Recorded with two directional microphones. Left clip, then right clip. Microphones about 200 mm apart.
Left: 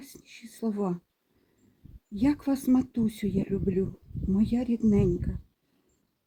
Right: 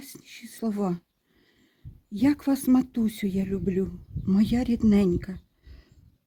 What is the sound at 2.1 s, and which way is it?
A woman's voice, 60° right (ahead or behind).